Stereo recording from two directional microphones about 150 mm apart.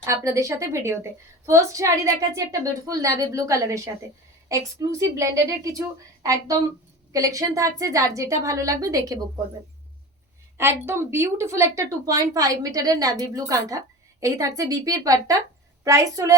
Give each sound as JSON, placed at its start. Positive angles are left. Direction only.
{"t": 0.0, "sound": "a woman's voice", "side_deg": -20}
{"t": 10.6, "sound": "a woman's voice", "side_deg": -15}